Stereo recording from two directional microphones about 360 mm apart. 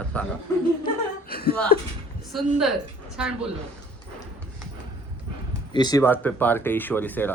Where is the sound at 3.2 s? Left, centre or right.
Centre.